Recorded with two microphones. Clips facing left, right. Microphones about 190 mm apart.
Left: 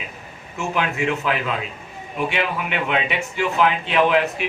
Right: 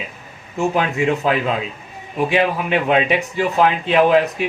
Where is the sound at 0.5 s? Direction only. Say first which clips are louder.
Right 5 dB; 35° right (ahead or behind).